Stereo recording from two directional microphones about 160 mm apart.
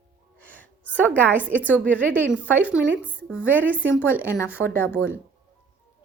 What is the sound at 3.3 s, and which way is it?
Speech, 10° right (ahead or behind).